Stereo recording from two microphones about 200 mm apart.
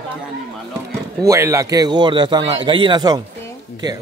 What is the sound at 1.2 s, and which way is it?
A man's voice, 15° right (ahead or behind).